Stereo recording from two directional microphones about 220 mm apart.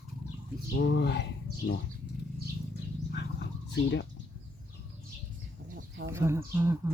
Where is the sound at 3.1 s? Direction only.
50° left (ahead or behind).